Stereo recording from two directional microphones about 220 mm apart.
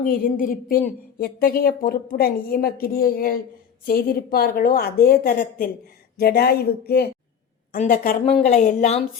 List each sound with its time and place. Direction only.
0.1 s a woman's voice: 40° left (ahead or behind)